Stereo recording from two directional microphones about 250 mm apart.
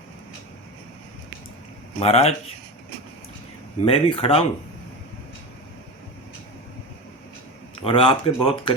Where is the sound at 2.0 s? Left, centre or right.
Left.